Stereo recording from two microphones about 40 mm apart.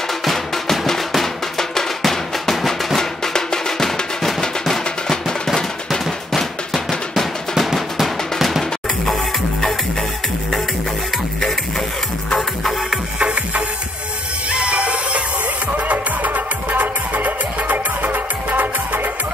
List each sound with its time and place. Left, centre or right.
0.2 s drum: centre
3.0 s music: centre
5.9 s drum: centre
7.5 s music: centre
12.3 s music: centre
13.2 s music: right
15.9 s music: right